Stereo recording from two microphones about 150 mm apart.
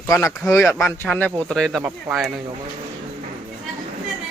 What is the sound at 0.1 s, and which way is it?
Speech, 20° left (ahead or behind).